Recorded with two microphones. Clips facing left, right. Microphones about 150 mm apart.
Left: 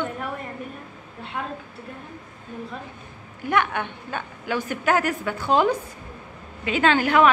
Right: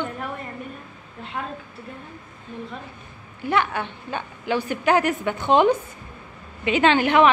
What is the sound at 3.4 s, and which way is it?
Speech, 50° left (ahead or behind).